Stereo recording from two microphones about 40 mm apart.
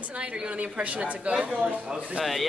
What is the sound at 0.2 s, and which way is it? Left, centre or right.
A woman's voice, right.